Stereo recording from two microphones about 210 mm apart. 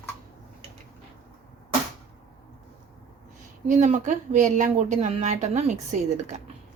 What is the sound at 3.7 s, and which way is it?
Speech, 35° right (ahead or behind).